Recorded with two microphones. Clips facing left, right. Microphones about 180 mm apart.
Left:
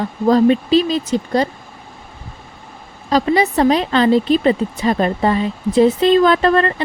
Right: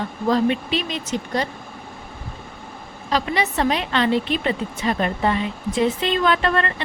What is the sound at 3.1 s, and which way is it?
A woman's voice, 40° left (ahead or behind).